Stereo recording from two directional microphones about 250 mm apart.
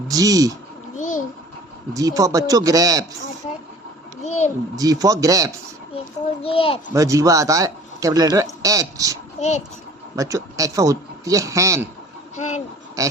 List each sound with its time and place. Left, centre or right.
0.1 s speech: centre
0.9 s a sound: left
1.9 s speech: centre
4.2 s a sound: left
4.8 s speech: centre
6.4 s a child's voice: left
6.9 s speech: centre
9.4 s a child's voice: left
10.2 s speech: centre
12.4 s a child's voice: left
13.0 s speech: centre